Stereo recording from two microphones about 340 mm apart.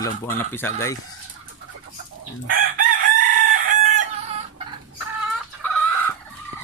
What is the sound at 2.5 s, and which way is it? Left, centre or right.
Chicken, right.